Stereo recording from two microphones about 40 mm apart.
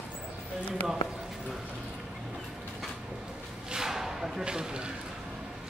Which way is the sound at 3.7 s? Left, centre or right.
Centre.